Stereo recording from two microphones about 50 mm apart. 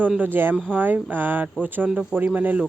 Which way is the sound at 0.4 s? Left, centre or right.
Right.